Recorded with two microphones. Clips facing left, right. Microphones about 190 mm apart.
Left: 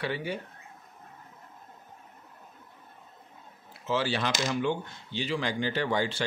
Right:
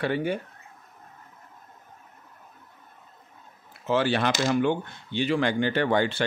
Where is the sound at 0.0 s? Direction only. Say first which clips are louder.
Right 6 dB; 50° right (ahead or behind).